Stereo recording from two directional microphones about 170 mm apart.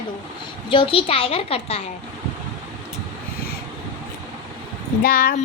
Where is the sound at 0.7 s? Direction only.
30° left (ahead or behind).